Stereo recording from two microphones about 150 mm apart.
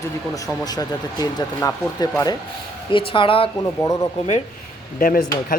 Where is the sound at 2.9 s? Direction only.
35° left (ahead or behind).